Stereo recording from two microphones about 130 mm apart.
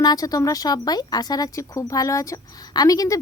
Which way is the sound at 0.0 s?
30° left (ahead or behind).